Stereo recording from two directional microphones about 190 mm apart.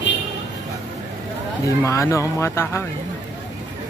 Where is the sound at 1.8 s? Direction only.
15° left (ahead or behind).